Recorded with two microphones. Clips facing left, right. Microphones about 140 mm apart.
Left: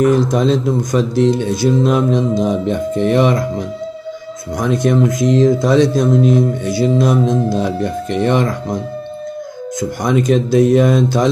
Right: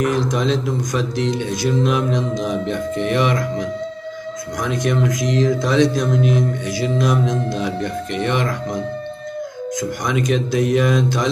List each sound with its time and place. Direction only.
0.3 s speech: 35° left (ahead or behind)
9.8 s speech: 35° left (ahead or behind)